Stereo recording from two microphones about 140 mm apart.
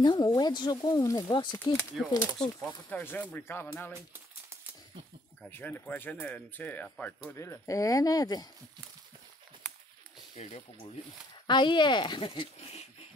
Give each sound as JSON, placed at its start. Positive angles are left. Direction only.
{"t": 0.0, "sound": "speech", "side_deg": 25}
{"t": 1.6, "sound": "speech", "side_deg": 20}
{"t": 2.1, "sound": "speech", "side_deg": 30}
{"t": 2.9, "sound": "speech", "side_deg": 15}
{"t": 5.5, "sound": "speech", "side_deg": 10}
{"t": 10.3, "sound": "speech", "side_deg": 50}
{"t": 11.4, "sound": "speech", "side_deg": 35}